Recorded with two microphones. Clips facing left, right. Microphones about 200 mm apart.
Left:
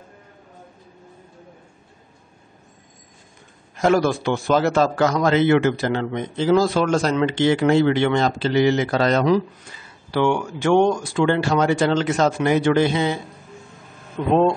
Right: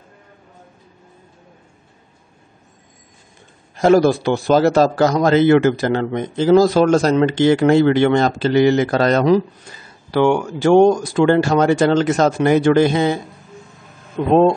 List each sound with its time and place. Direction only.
3.7 s a man's voice: 35° right (ahead or behind)
10.6 s speech: 40° right (ahead or behind)